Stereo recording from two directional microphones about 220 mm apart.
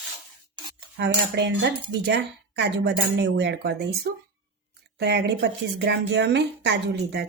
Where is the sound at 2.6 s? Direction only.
45° right (ahead or behind).